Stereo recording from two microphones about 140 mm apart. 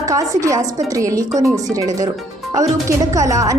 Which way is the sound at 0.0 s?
25° right (ahead or behind).